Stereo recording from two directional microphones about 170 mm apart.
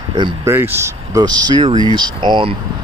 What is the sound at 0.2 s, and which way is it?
Speech, 15° right (ahead or behind).